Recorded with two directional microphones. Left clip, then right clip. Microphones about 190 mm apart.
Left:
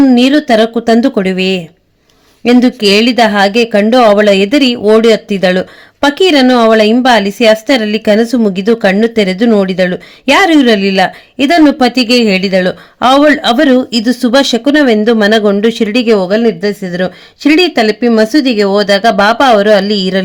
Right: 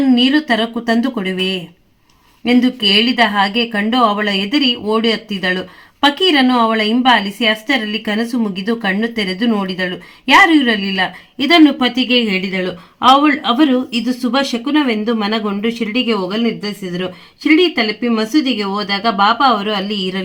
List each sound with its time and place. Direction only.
0.1 s a woman's voice: 40° left (ahead or behind)